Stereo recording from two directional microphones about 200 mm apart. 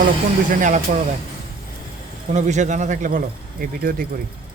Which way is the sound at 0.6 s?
35° right (ahead or behind).